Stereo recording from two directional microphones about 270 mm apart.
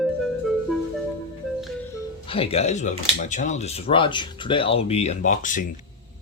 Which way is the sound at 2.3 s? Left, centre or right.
Left.